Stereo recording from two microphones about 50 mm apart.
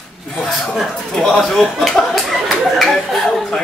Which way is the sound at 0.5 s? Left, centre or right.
Centre.